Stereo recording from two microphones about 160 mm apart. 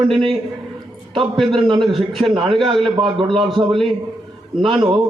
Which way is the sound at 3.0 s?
30° right (ahead or behind).